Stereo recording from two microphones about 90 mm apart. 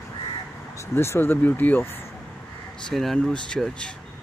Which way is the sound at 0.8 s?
30° left (ahead or behind).